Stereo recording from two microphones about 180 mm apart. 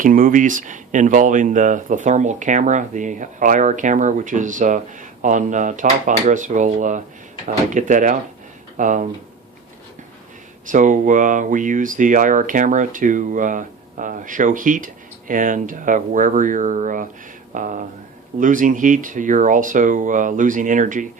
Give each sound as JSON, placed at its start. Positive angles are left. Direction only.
{"t": 0.0, "sound": "speech", "side_deg": -50}
{"t": 10.7, "sound": "speech", "side_deg": -45}